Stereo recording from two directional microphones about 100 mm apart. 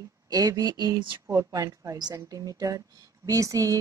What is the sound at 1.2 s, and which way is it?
A woman's voice, 30° right (ahead or behind).